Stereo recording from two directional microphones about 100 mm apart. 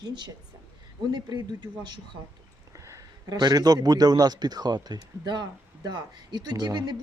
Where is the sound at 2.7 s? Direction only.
30° right (ahead or behind).